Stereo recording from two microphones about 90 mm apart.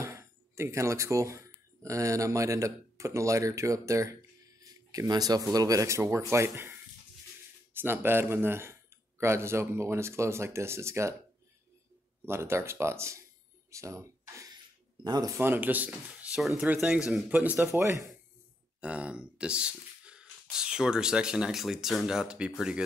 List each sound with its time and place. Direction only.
0.0 s speech: 30° right (ahead or behind)
7.7 s speech: 25° right (ahead or behind)
12.3 s speech: 30° right (ahead or behind)
15.0 s speech: 45° right (ahead or behind)
15.3 s speech: 25° right (ahead or behind)
16.3 s speech: centre (ahead or behind)
17.3 s speech: 20° right (ahead or behind)
17.6 s speech: 30° right (ahead or behind)
18.8 s speech: 15° right (ahead or behind)